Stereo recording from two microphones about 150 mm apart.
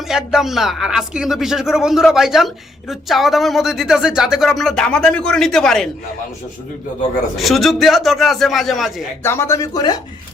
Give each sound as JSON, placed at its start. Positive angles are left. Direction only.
{"t": 0.1, "sound": "speech", "side_deg": -5}
{"t": 7.3, "sound": "speech", "side_deg": 0}
{"t": 9.2, "sound": "speech", "side_deg": 15}